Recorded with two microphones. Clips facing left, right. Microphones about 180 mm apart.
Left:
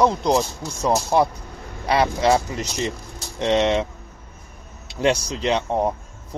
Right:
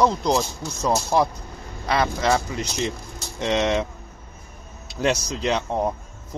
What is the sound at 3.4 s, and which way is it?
Speech, 30° left (ahead or behind).